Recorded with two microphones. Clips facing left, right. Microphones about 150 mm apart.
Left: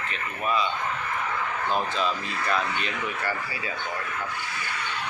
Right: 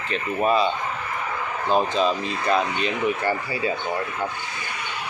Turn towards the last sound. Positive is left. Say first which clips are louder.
# right 7 dB
turn(degrees=-25)  # may be behind; listen again after turning